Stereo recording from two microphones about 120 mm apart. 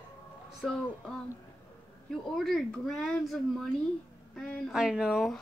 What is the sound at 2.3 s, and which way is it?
Speech, centre (ahead or behind).